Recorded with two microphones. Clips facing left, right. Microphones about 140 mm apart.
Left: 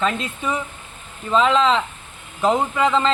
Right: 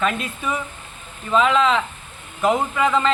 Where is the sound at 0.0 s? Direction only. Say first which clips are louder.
Left 1 dB; 25° left (ahead or behind).